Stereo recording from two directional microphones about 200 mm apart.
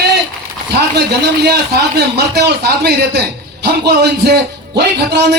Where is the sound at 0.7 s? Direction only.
55° right (ahead or behind).